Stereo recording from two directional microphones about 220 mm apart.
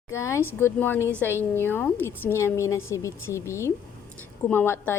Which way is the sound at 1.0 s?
10° right (ahead or behind).